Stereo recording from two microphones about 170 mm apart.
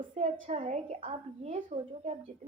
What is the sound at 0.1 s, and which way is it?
A woman's voice, 35° right (ahead or behind).